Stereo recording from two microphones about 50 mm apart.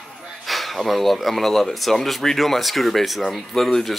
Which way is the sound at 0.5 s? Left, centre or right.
Centre.